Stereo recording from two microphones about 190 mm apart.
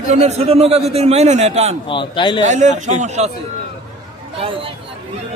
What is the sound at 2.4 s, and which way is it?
Speech, 40° right (ahead or behind).